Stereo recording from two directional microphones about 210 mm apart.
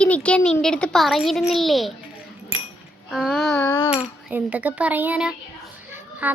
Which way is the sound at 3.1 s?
Centre (ahead or behind).